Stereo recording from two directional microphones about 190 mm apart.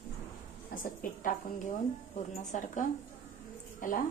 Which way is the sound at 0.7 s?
45° left (ahead or behind).